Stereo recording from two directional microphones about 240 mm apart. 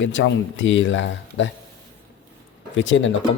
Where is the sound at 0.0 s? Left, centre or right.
Left.